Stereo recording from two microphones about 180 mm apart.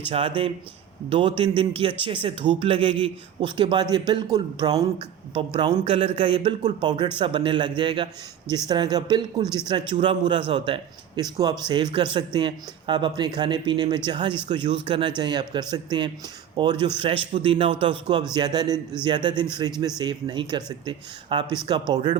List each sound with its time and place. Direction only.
0.1 s a man's voice: 30° right (ahead or behind)
6.7 s a man's voice: 25° right (ahead or behind)